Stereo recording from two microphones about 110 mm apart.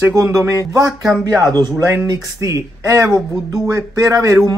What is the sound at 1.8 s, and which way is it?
Speech, 20° right (ahead or behind).